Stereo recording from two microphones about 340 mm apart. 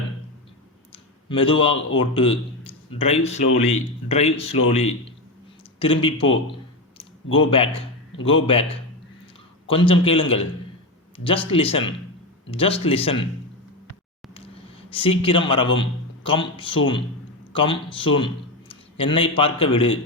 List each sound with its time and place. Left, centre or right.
0.9 s a sound: centre
2.0 s speech: centre
7.3 s speech: centre
14.8 s a man's voice: centre